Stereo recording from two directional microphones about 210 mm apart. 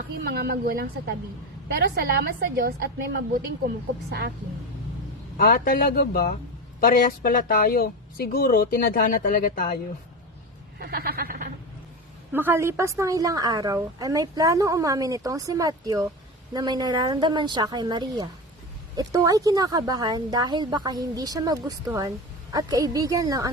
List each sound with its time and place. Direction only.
0.3 s a woman's voice: 50° right (ahead or behind)
5.4 s a woman's voice: 45° left (ahead or behind)
10.8 s speech: 45° right (ahead or behind)
12.3 s a woman's voice: 10° right (ahead or behind)